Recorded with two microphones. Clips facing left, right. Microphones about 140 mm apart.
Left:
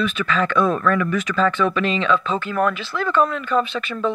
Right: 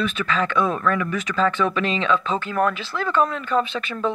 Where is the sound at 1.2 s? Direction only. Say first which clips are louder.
Left 2 dB; 35° right (ahead or behind).